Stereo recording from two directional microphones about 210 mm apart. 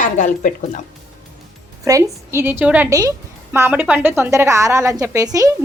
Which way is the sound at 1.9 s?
15° right (ahead or behind).